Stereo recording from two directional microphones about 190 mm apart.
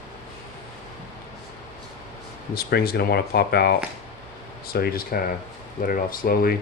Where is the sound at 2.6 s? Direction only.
55° left (ahead or behind).